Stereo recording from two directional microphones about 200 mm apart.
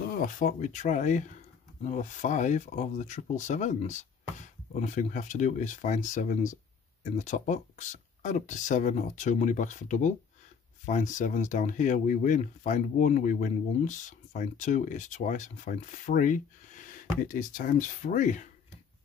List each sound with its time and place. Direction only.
0.1 s speech: 40° left (ahead or behind)